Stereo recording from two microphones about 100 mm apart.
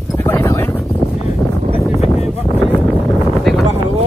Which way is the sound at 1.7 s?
90° left.